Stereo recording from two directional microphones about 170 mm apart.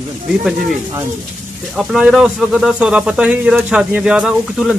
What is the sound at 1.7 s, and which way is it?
Speech, centre (ahead or behind).